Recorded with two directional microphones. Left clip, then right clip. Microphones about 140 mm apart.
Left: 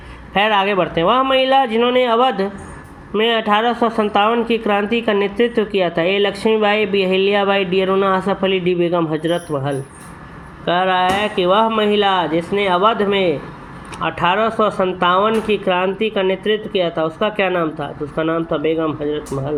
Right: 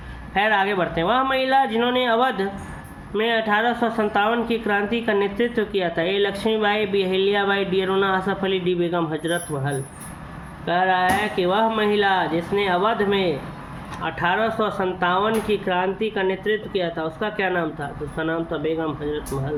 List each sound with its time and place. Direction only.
0.3 s speech: 40° left (ahead or behind)